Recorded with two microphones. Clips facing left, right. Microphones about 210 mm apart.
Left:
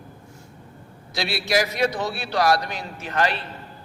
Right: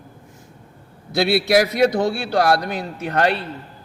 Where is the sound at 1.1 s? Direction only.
60° right (ahead or behind).